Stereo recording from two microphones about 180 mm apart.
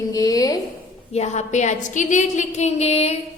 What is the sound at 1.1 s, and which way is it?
A woman's voice, 40° left (ahead or behind).